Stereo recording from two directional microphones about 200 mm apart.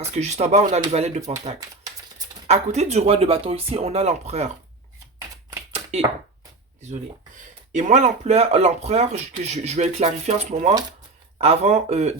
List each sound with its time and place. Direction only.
0.0 s speech: 35° right (ahead or behind)
1.5 s typewriter: 20° right (ahead or behind)
2.5 s speech: 35° right (ahead or behind)
5.7 s a sound: 30° right (ahead or behind)
7.7 s speech: 35° right (ahead or behind)